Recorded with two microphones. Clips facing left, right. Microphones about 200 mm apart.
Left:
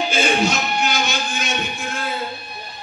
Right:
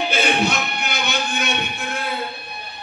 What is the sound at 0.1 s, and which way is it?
Music, 60° right (ahead or behind).